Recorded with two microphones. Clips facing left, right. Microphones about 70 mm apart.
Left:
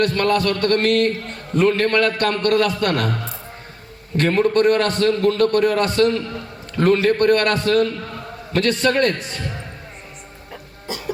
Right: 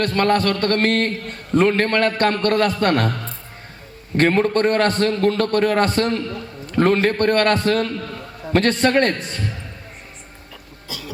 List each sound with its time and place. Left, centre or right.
0.0 s a man's voice: right
4.2 s a man's voice: right
10.8 s cough: left